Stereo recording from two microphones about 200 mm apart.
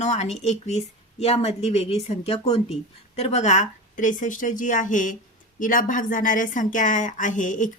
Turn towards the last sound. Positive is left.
turn(degrees=40)  # may be behind; listen again after turning